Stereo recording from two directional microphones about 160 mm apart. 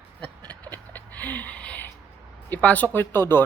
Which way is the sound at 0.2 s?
10° left (ahead or behind).